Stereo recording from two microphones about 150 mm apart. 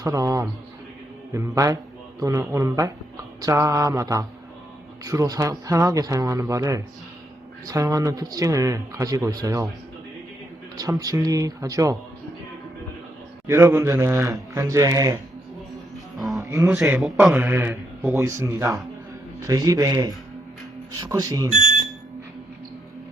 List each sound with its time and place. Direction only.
0.0 s speech: 25° right (ahead or behind)
10.8 s speech: 25° right (ahead or behind)
13.5 s speech: 20° right (ahead or behind)
15.7 s music: centre (ahead or behind)
16.4 s a sound: 20° right (ahead or behind)
16.7 s speech: 20° right (ahead or behind)
17.0 s a man's voice: centre (ahead or behind)
17.3 s a man's voice: 15° right (ahead or behind)